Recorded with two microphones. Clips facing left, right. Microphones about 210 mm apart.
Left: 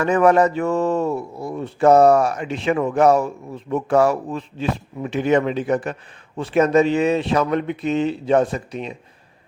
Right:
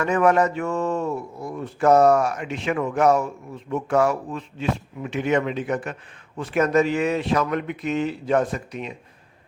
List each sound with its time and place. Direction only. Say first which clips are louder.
0.0 s a man's voice: left 4 dB; 35° left (ahead or behind)